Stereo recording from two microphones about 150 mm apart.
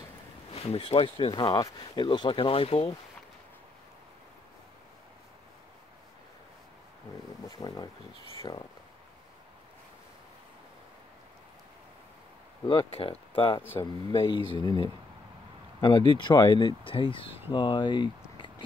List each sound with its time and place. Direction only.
0.6 s speech: 40° left (ahead or behind)
7.4 s a sound: 25° left (ahead or behind)
8.4 s speech: 30° left (ahead or behind)
12.9 s speech: 40° left (ahead or behind)
13.6 s speech: 15° left (ahead or behind)
14.1 s speech: 35° left (ahead or behind)
16.6 s speech: 35° left (ahead or behind)